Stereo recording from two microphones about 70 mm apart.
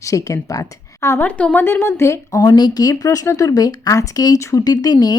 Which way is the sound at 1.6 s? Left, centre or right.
Left.